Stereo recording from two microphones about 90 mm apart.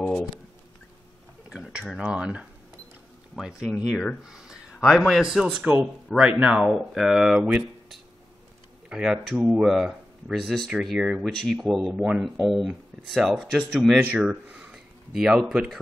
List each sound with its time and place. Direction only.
1.5 s tick-tock: 10° right (ahead or behind)
2.0 s speech: 10° right (ahead or behind)
4.2 s a sound: 5° right (ahead or behind)
4.8 s speech: centre (ahead or behind)
5.6 s speech: 20° right (ahead or behind)
8.8 s speech: 5° right (ahead or behind)
14.3 s a sound: 15° right (ahead or behind)